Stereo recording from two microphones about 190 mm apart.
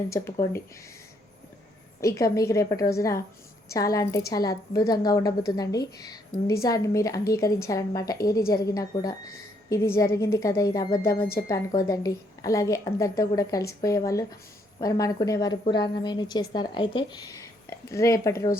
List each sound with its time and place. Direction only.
2.0 s a woman's voice: 15° left (ahead or behind)